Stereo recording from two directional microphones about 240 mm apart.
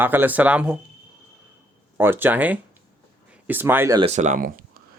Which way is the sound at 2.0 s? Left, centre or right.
Centre.